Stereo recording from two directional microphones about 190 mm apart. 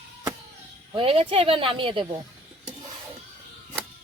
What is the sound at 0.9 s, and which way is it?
Speech, 30° right (ahead or behind).